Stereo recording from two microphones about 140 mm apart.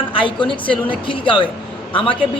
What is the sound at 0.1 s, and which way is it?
A man's voice, 35° left (ahead or behind).